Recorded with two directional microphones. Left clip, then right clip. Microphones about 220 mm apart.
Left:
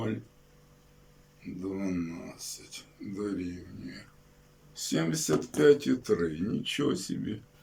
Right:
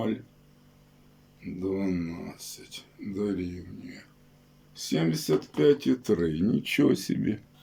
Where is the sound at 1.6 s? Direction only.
20° right (ahead or behind).